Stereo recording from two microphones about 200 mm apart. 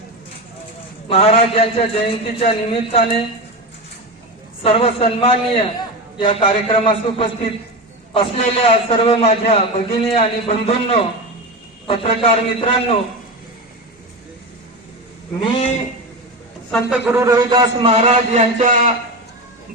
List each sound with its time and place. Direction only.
1.0 s a man's voice: 30° left (ahead or behind)
4.6 s a man's voice: 30° left (ahead or behind)
15.4 s a man's voice: 30° left (ahead or behind)
16.9 s a man's voice: 10° right (ahead or behind); by 18.9 s 40° right (ahead or behind)